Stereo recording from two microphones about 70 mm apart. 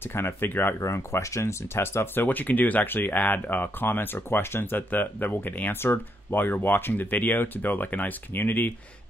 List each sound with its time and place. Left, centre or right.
0.1 s speech: left
0.7 s speech: left
2.2 s speech: left